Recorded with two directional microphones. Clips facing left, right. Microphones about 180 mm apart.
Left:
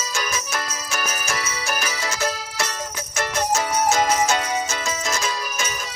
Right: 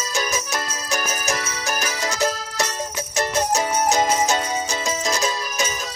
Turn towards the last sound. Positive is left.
turn(degrees=-15)  # may be behind; listen again after turning